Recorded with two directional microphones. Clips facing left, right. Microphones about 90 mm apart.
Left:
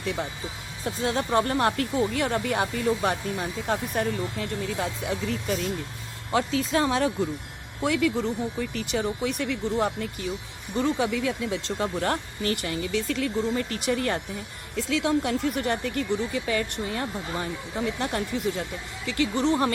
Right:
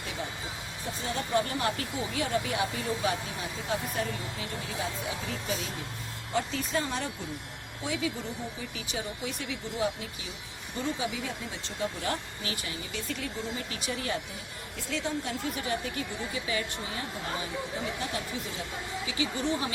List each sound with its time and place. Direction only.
0.0 s speech: 65° left (ahead or behind)
6.6 s speech: 90° left
7.8 s speech: 70° left (ahead or behind); by 10.2 s 55° left (ahead or behind)
10.8 s speech: 65° left (ahead or behind)
13.7 s speech: 55° left (ahead or behind)
14.8 s speech: 90° left; by 19.5 s 65° left (ahead or behind)